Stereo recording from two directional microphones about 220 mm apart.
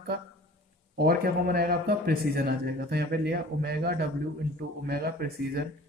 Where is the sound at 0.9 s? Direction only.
45° right (ahead or behind).